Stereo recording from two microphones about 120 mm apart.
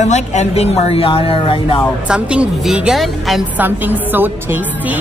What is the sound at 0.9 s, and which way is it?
Speech, 50° left (ahead or behind).